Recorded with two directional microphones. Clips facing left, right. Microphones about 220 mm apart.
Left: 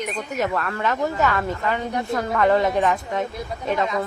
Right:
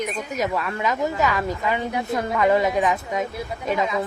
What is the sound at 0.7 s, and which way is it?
Speech, 15° right (ahead or behind).